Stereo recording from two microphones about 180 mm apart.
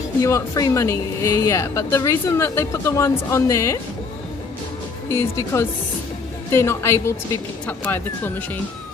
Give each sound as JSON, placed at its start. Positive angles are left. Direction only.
{"t": 0.2, "sound": "a woman's voice", "side_deg": 20}
{"t": 5.1, "sound": "a woman's voice", "side_deg": 15}